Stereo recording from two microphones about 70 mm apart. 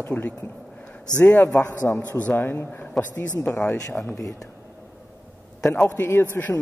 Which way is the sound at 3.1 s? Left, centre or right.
Left.